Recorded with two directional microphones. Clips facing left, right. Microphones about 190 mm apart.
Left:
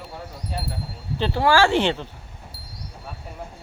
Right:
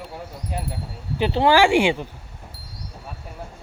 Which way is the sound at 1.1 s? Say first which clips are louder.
Right 2 dB; 15° right (ahead or behind).